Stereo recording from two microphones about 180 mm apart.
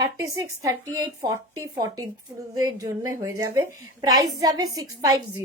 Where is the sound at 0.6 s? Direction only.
15° right (ahead or behind).